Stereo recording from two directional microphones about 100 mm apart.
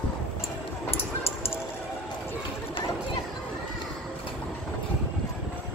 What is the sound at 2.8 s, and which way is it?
Chatter, 60° left (ahead or behind).